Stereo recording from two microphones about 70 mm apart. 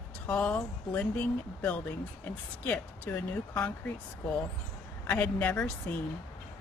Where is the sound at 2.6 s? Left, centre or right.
Left.